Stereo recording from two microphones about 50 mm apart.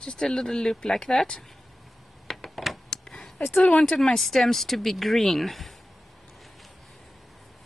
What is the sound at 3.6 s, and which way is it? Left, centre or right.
Speech, centre.